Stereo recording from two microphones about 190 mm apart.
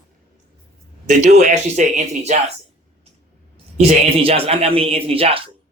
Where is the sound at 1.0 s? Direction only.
40° right (ahead or behind).